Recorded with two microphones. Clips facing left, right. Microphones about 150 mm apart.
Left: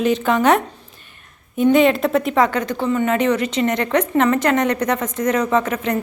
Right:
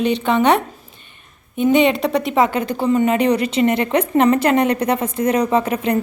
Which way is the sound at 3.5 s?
25° right (ahead or behind).